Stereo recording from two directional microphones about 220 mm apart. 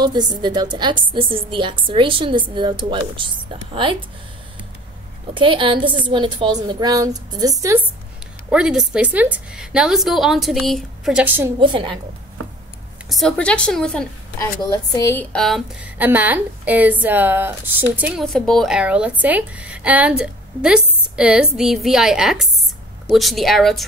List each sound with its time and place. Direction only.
0.0 s a woman's voice: 20° right (ahead or behind)
5.3 s a woman's voice: 25° right (ahead or behind)
8.5 s a woman's voice: 5° right (ahead or behind)
11.6 s a woman's voice: 20° right (ahead or behind)
13.1 s a woman's voice: 5° left (ahead or behind)
14.6 s speech: 15° left (ahead or behind)
15.3 s a woman's voice: centre (ahead or behind)